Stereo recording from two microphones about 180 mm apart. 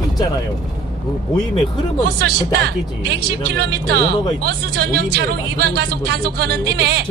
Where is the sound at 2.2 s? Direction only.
65° right (ahead or behind).